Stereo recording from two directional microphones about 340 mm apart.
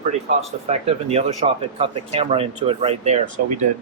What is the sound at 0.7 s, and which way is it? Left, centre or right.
Speech, centre.